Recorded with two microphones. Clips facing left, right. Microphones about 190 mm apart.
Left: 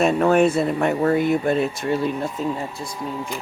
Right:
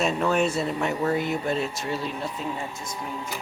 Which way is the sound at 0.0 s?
55° left (ahead or behind).